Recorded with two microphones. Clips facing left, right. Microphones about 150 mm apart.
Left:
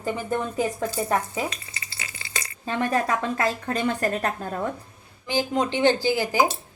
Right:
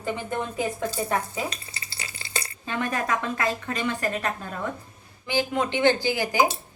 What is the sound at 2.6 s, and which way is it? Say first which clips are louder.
A woman's voice: left 4 dB; 35° left (ahead or behind).